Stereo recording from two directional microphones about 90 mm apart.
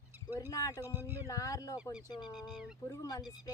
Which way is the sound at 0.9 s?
20° right (ahead or behind).